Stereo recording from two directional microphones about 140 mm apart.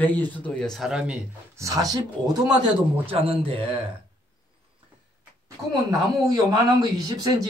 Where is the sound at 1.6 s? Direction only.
25° right (ahead or behind).